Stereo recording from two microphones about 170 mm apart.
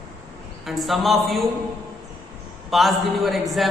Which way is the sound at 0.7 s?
Centre (ahead or behind).